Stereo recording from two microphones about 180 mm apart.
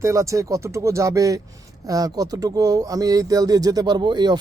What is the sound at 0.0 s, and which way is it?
Speech, 15° right (ahead or behind).